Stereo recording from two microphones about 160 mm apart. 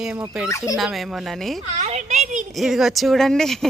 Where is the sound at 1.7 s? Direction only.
45° right (ahead or behind).